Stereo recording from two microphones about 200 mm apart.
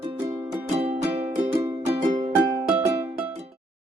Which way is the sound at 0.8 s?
30° right (ahead or behind).